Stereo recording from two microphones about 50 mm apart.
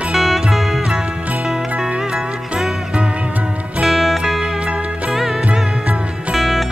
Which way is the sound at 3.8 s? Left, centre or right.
Centre.